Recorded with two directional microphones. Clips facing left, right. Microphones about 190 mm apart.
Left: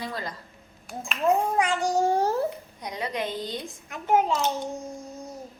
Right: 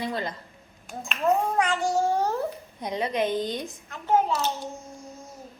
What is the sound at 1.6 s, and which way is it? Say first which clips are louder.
Speech: even; 10° left (ahead or behind).